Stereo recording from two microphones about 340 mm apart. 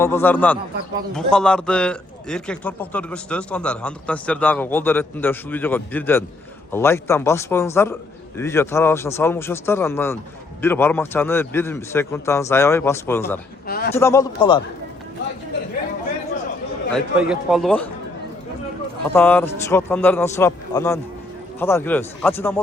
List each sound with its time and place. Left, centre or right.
0.0 s a man's voice: centre
13.7 s a man's voice: left
13.9 s a man's voice: centre
16.9 s speech: centre
19.1 s a man's voice: centre